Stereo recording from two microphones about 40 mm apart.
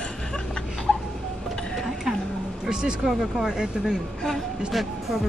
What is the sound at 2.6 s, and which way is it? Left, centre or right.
Speech, centre.